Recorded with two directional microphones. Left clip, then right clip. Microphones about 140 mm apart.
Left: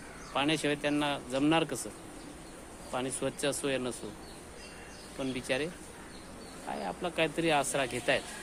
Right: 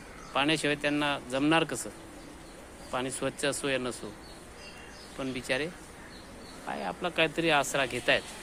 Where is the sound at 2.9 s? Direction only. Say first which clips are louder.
Right 2 dB; 15° right (ahead or behind).